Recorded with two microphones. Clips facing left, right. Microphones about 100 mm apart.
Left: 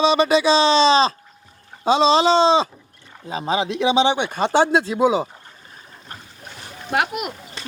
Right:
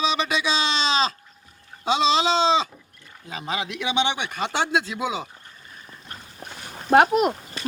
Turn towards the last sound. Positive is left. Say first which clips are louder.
# right 7 dB
turn(degrees=-40)  # may be behind; listen again after turning